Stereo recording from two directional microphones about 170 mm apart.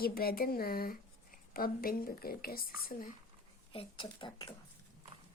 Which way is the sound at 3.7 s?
30° left (ahead or behind).